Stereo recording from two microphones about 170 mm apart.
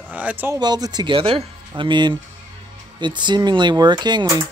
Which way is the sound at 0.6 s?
25° right (ahead or behind).